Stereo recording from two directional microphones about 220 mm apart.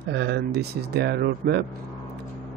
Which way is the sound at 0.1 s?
50° right (ahead or behind).